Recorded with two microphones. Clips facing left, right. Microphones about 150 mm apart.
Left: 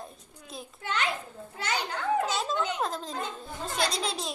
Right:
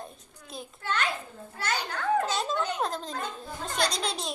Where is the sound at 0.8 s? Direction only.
15° left (ahead or behind).